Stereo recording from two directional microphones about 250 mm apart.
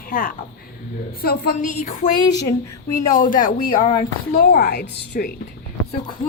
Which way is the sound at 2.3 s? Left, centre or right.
Centre.